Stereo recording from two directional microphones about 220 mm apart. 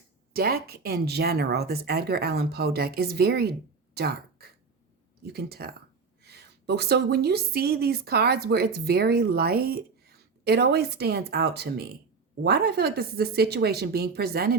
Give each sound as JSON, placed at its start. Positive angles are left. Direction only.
{"t": 0.3, "sound": "a woman's voice", "side_deg": -45}
{"t": 3.9, "sound": "a sound", "side_deg": -45}
{"t": 5.2, "sound": "a woman's voice", "side_deg": -45}